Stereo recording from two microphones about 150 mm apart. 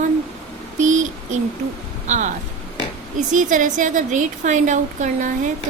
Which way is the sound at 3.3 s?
55° right (ahead or behind).